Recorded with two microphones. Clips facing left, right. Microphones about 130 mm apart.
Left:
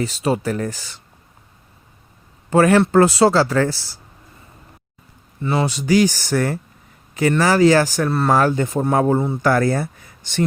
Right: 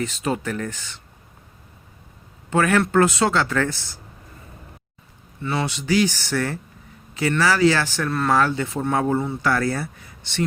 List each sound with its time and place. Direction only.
0.0 s speech: 35° left (ahead or behind)
2.5 s speech: 35° left (ahead or behind)
5.4 s speech: 35° left (ahead or behind)